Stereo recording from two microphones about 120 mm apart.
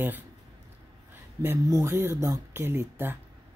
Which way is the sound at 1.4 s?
25° right (ahead or behind).